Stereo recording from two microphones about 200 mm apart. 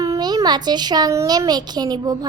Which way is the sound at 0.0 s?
20° right (ahead or behind).